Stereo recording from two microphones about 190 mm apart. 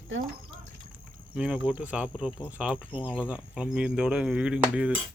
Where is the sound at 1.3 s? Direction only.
5° right (ahead or behind).